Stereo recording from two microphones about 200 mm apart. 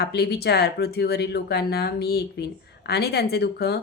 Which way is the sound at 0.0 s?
55° left (ahead or behind).